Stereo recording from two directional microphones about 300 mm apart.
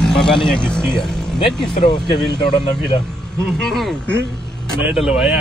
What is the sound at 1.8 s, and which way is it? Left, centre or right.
Speech, centre.